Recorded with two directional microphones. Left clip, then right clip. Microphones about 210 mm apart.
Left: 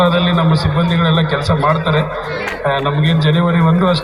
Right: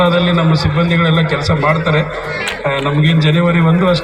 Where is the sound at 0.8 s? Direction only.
40° right (ahead or behind).